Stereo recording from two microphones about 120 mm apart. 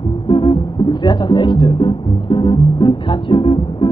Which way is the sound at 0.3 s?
40° left (ahead or behind).